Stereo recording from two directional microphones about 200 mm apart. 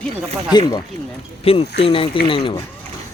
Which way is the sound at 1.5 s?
30° left (ahead or behind).